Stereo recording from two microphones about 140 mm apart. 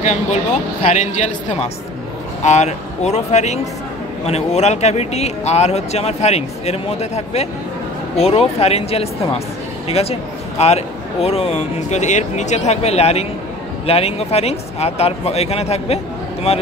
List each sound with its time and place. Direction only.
0.0 s speech: 55° left (ahead or behind)